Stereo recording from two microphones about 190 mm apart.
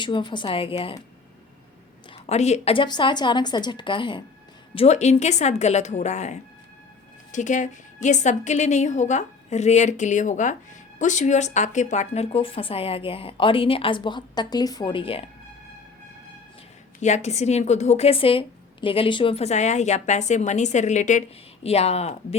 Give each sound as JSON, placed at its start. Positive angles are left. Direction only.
{"t": 0.0, "sound": "speech", "side_deg": 25}
{"t": 2.0, "sound": "a woman's voice", "side_deg": 35}
{"t": 17.0, "sound": "a woman's voice", "side_deg": 35}